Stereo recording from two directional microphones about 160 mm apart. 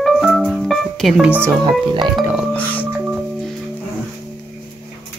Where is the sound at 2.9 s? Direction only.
5° right (ahead or behind).